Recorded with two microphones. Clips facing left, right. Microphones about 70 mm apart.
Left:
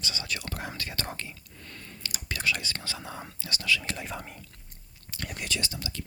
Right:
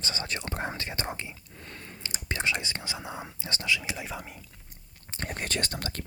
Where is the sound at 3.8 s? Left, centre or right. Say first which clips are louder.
Even; centre.